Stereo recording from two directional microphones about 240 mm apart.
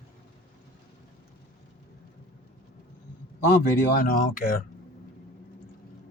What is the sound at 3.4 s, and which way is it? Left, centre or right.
Speech, left.